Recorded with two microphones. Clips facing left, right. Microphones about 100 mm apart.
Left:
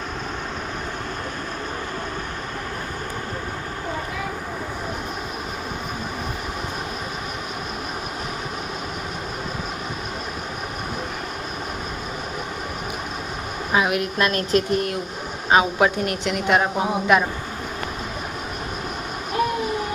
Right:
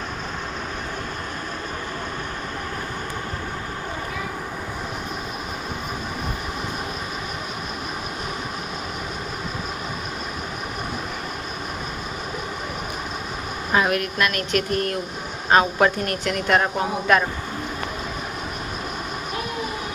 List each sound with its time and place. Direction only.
13.7 s speech: 10° left (ahead or behind)
14.0 s speech: 30° left (ahead or behind)
14.7 s a man's voice: 15° left (ahead or behind)